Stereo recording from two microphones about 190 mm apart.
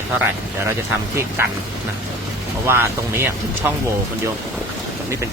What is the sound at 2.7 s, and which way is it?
Speech, 10° right (ahead or behind).